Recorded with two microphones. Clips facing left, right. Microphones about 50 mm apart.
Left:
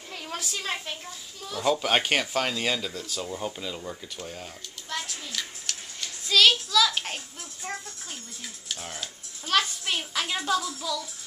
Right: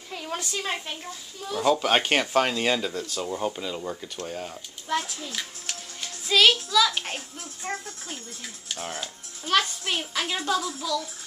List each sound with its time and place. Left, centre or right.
0.1 s a sound: centre
0.6 s a child's voice: centre
8.7 s speech: right
9.0 s speech: centre